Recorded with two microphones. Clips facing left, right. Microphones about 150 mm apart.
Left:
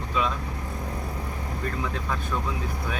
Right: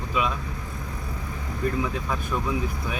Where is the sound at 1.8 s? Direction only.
10° right (ahead or behind).